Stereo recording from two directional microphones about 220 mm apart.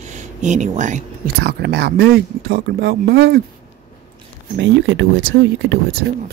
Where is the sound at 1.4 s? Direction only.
45° right (ahead or behind).